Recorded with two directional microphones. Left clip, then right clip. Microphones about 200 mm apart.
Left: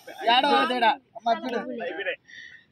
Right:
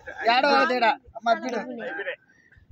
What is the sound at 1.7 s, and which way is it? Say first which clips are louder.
Speech: left 1 dB; 35° left (ahead or behind).